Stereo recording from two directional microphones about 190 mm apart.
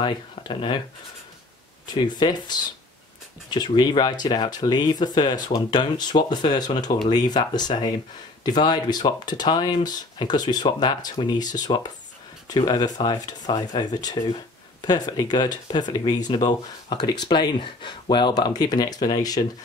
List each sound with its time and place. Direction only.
0.0 s speech: 25° left (ahead or behind)
2.0 s speech: 20° left (ahead or behind)